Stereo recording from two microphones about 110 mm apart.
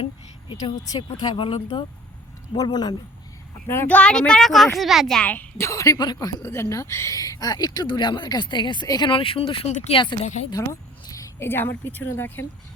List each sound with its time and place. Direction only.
1.2 s speech: 50° left (ahead or behind)
2.6 s speech: 40° left (ahead or behind)
3.7 s a woman's voice: 15° left (ahead or behind)
5.6 s speech: 30° left (ahead or behind); by 10.2 s 45° left (ahead or behind)
10.5 s speech: 30° left (ahead or behind)